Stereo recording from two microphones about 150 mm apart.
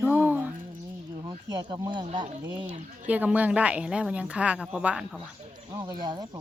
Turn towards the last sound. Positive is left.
turn(degrees=-25)  # may be behind; listen again after turning